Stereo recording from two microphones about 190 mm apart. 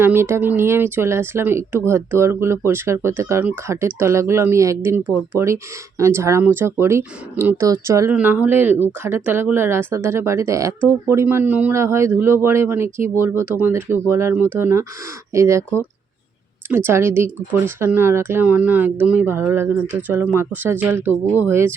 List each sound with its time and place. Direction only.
0.0 s speech: 10° right (ahead or behind)
16.6 s speech: 10° right (ahead or behind)